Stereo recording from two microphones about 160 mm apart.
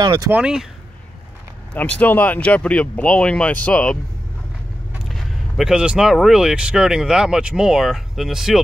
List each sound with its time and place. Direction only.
0.0 s speech: 25° right (ahead or behind)
0.3 s speech: 5° right (ahead or behind)
1.7 s speech: 10° left (ahead or behind)